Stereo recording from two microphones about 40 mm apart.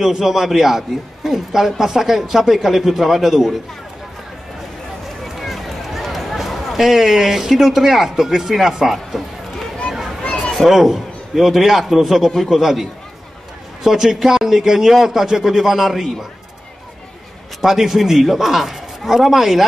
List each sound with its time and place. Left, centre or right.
0.0 s a man's voice: centre
5.3 s speech: centre
10.5 s a man's voice: centre
13.8 s a man's voice: centre
17.6 s a man's voice: centre